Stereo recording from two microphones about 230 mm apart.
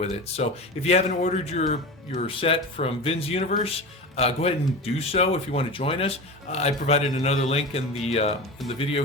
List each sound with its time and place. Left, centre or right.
0.4 s speech: left